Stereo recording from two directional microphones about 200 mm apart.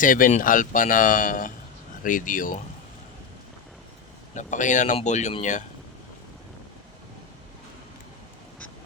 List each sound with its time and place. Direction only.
0.0 s speech: 40° left (ahead or behind)
4.4 s speech: 40° left (ahead or behind)